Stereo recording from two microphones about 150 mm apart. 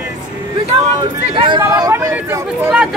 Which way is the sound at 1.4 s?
30° right (ahead or behind).